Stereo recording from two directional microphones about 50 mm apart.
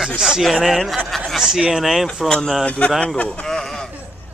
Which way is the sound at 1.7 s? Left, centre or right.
Centre.